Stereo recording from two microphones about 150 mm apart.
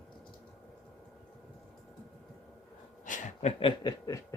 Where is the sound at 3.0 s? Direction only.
60° left (ahead or behind); by 3.9 s 35° left (ahead or behind).